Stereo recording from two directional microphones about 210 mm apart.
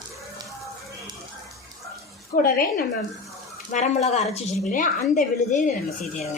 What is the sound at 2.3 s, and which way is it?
A woman's voice, 45° left (ahead or behind).